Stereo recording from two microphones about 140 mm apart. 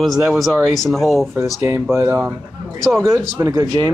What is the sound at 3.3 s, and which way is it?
Speech, 20° right (ahead or behind).